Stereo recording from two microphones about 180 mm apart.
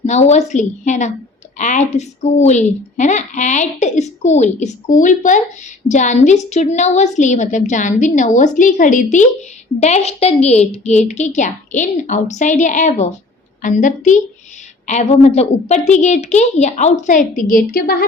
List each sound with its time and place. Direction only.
0.0 s a woman's voice: 40° left (ahead or behind); by 18.0 s 55° left (ahead or behind)